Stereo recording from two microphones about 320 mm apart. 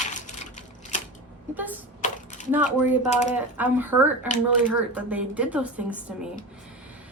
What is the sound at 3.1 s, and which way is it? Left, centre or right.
Speech, left.